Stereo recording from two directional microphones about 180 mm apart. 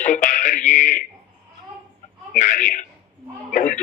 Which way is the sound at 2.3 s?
45° left (ahead or behind).